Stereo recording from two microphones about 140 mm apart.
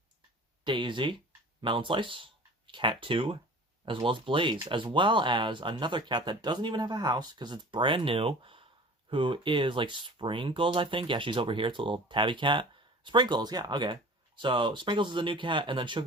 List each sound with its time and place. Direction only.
0.6 s speech: 35° right (ahead or behind)